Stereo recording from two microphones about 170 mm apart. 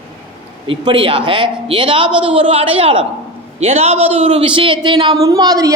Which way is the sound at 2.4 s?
35° right (ahead or behind).